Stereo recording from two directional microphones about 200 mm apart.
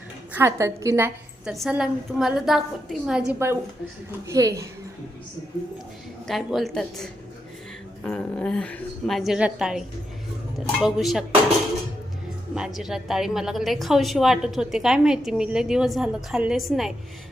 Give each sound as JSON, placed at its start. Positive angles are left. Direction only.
{"t": 0.3, "sound": "a woman's voice", "side_deg": -15}
{"t": 1.5, "sound": "a woman's voice", "side_deg": 0}
{"t": 6.2, "sound": "a woman's voice", "side_deg": 0}
{"t": 12.5, "sound": "a woman's voice", "side_deg": 0}